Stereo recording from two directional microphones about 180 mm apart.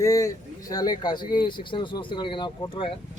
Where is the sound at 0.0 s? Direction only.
15° left (ahead or behind).